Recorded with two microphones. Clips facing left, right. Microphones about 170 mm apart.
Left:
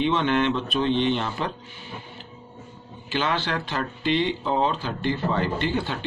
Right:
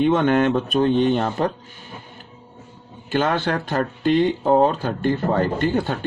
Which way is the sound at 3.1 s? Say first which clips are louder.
Right 5 dB; 50° right (ahead or behind).